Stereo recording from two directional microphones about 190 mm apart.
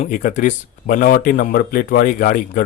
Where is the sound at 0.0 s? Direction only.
40° left (ahead or behind).